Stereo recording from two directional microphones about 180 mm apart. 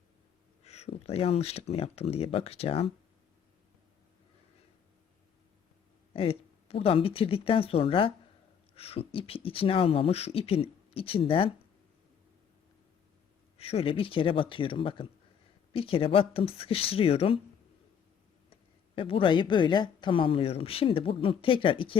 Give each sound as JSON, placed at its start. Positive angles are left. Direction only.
{"t": 0.6, "sound": "a sound", "side_deg": 35}
{"t": 1.0, "sound": "speech", "side_deg": 35}
{"t": 6.1, "sound": "speech", "side_deg": 30}
{"t": 13.6, "sound": "speech", "side_deg": 35}
{"t": 18.9, "sound": "speech", "side_deg": 30}